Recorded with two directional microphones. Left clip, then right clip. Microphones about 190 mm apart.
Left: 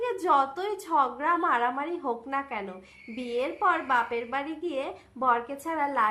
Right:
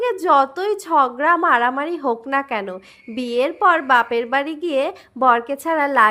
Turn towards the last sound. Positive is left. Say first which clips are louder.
# right 11 dB
turn(degrees=-45)  # may be behind; listen again after turning